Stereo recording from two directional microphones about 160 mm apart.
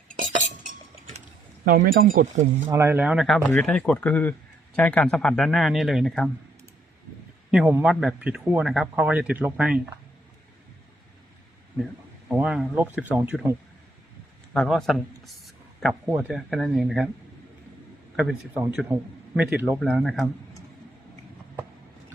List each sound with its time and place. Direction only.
0.1 s chink: 55° right (ahead or behind)
1.6 s speech: 65° right (ahead or behind)
2.6 s speech: 15° right (ahead or behind); by 6.3 s centre (ahead or behind)
7.7 s speech: 10° right (ahead or behind)
12.3 s speech: 5° right (ahead or behind)
14.5 s speech: centre (ahead or behind)
18.2 s speech: 5° right (ahead or behind)